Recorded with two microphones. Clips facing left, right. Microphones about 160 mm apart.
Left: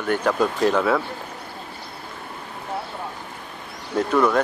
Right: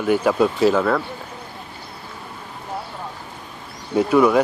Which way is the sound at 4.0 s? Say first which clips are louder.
Right 4 dB; 10° right (ahead or behind).